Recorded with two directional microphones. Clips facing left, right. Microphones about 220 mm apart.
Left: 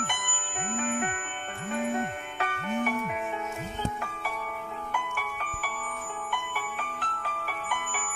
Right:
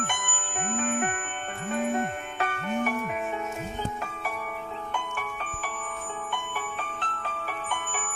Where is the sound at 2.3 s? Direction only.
45° right (ahead or behind).